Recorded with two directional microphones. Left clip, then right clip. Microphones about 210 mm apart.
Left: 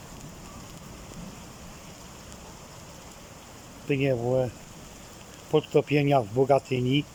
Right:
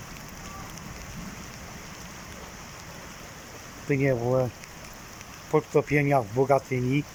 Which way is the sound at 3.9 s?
10° left (ahead or behind).